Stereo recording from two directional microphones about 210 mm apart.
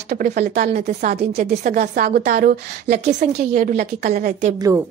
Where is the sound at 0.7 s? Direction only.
30° right (ahead or behind).